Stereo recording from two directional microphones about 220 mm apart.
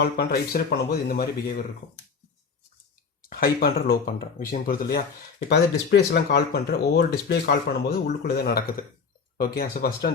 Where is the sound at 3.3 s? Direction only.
40° left (ahead or behind).